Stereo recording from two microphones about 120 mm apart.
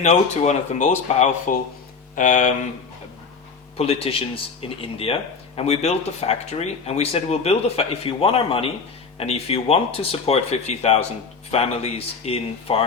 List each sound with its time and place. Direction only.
0.0 s speech: 75° left (ahead or behind)
3.8 s speech: 55° left (ahead or behind)